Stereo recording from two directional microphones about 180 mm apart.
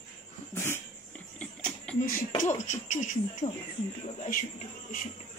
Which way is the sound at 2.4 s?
40° left (ahead or behind).